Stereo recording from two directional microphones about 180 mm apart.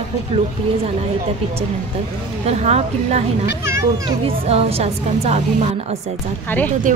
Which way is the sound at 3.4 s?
15° right (ahead or behind).